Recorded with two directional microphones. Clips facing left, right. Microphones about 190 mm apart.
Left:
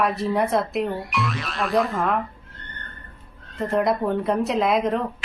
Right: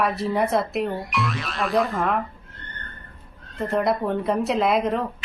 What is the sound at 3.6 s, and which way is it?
A woman's voice, centre (ahead or behind).